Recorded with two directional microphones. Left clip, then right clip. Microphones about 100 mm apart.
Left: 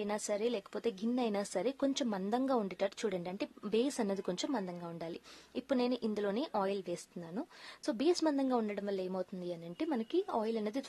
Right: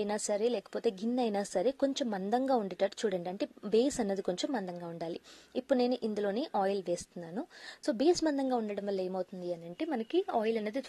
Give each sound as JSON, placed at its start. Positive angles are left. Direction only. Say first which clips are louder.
{"t": 0.0, "sound": "a woman's voice", "louder": "right 4 dB", "side_deg": -35}
{"t": 9.8, "sound": "a woman's voice", "louder": "right 2 dB", "side_deg": 0}